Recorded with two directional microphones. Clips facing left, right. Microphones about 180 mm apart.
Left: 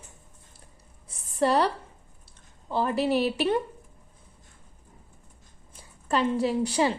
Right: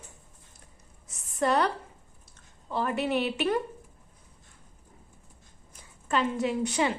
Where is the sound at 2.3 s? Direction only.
30° left (ahead or behind).